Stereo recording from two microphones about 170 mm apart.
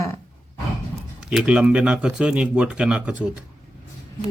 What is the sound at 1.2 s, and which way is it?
Speech, 5° right (ahead or behind).